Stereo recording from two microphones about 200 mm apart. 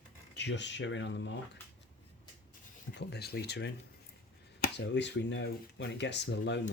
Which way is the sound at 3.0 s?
55° left (ahead or behind).